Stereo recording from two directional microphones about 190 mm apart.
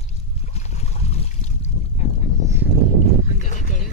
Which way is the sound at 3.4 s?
40° left (ahead or behind).